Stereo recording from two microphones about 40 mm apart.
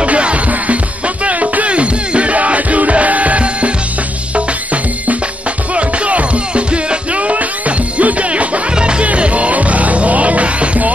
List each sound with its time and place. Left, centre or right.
0.0 s music: right
5.8 s music: right
8.7 s music: right
9.0 s music: right